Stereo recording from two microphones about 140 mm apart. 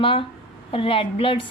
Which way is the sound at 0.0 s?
40° left (ahead or behind).